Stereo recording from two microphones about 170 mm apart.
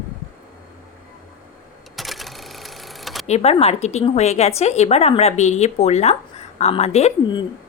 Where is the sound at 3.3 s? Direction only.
35° left (ahead or behind).